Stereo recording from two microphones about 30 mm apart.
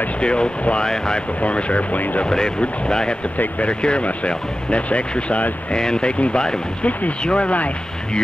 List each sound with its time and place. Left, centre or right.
0.2 s speech: left
1.4 s speech: left
2.2 s speech: left
3.6 s speech: left
5.7 s speech: left
6.1 s speech: left